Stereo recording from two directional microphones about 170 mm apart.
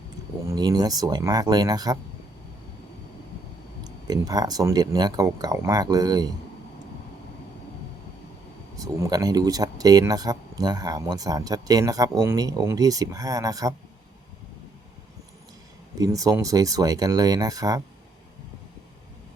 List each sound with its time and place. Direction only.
0.4 s speech: 20° right (ahead or behind)
4.0 s speech: 20° right (ahead or behind)
8.7 s speech: 20° right (ahead or behind)
16.0 s speech: 20° right (ahead or behind)